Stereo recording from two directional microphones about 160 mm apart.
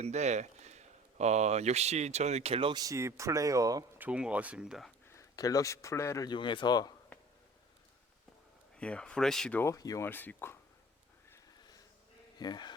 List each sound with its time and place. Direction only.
0.0 s speech: 45° right (ahead or behind); by 3.8 s 20° right (ahead or behind)
3.9 s speech: 10° right (ahead or behind)
5.0 s speech: 20° left (ahead or behind)
8.7 s speech: 5° left (ahead or behind)
12.4 s speech: 25° left (ahead or behind)